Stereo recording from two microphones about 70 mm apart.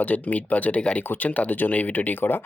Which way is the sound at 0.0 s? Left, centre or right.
Left.